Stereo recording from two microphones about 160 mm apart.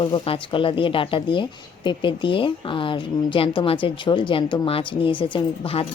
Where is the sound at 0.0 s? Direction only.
30° left (ahead or behind).